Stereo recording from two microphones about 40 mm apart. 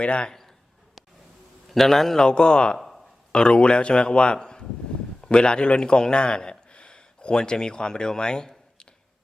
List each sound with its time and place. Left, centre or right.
0.0 s a man's voice: left
0.3 s a sound: centre
1.7 s a man's voice: centre
2.2 s a man's voice: left